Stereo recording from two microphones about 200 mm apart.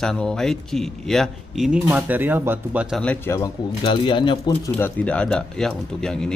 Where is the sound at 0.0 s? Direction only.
5° left (ahead or behind).